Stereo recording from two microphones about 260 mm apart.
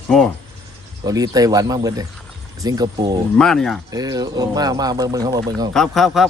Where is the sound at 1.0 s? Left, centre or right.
Centre.